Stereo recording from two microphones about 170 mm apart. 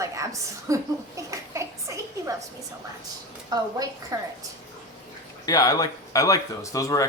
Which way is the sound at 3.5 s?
20° right (ahead or behind).